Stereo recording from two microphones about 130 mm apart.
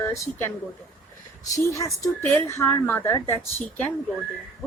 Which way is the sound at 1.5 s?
25° left (ahead or behind).